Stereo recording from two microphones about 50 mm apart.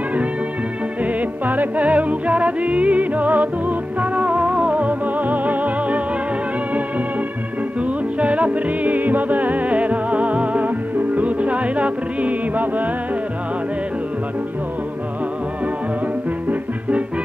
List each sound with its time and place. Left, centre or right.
1.4 s music: right
8.2 s music: right